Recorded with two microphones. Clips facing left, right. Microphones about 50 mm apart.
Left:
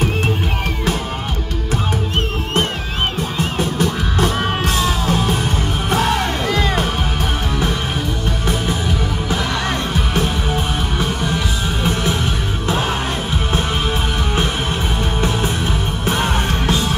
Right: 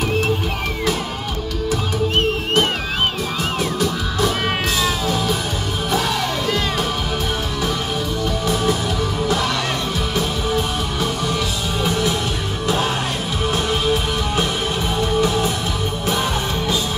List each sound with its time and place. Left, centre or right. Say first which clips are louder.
3.3 s music: left 2 dB; left
5.9 s music: left 3 dB; left
11.8 s music: even; left